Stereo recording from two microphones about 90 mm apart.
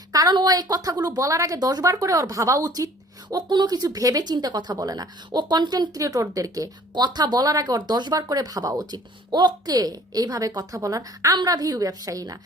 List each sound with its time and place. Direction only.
0.1 s a sound: 40° right (ahead or behind)
0.3 s speech: 45° right (ahead or behind)
3.2 s speech: 50° right (ahead or behind)
6.9 s speech: 55° right (ahead or behind)